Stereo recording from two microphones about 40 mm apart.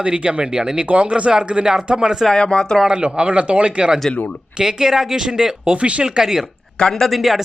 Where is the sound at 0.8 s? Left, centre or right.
Right; by 2.3 s centre.